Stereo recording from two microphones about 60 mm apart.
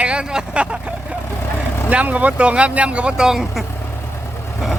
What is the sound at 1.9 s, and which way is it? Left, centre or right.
Speech, right.